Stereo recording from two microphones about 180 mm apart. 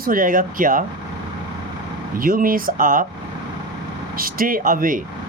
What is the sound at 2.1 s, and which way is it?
Speech, 50° right (ahead or behind).